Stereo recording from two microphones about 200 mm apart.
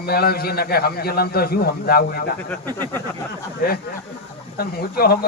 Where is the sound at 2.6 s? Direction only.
20° right (ahead or behind).